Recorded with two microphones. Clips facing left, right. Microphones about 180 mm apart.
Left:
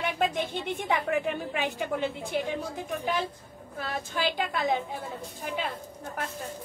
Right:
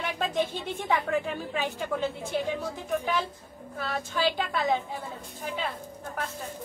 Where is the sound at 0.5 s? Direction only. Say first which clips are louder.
Even; 15° left (ahead or behind).